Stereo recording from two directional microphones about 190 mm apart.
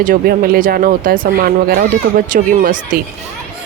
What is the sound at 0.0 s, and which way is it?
Speech, 50° right (ahead or behind).